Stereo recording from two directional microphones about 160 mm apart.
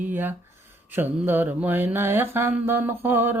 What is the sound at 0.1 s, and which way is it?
Mantra, 10° right (ahead or behind).